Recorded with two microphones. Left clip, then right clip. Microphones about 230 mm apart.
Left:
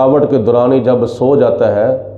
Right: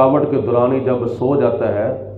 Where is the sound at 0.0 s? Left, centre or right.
Left.